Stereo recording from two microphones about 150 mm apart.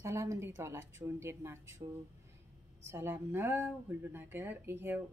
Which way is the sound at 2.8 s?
15° right (ahead or behind).